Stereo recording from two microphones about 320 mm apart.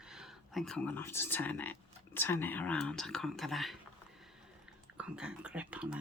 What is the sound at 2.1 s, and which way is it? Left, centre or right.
Speech, centre.